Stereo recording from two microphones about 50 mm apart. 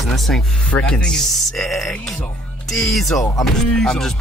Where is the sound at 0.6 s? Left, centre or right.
Left.